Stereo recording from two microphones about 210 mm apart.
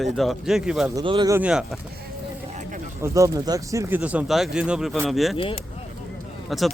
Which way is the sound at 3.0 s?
15° right (ahead or behind).